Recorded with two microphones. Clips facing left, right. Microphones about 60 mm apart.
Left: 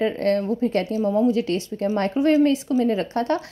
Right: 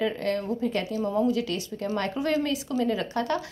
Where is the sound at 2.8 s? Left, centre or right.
Left.